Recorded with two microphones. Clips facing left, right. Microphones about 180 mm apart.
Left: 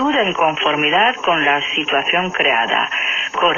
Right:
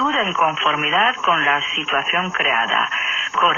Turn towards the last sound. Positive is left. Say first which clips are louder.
# left 3 dB
turn(degrees=20)  # may be behind; listen again after turning